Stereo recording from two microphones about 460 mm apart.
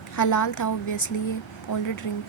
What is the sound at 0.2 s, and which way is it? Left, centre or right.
Speech, left.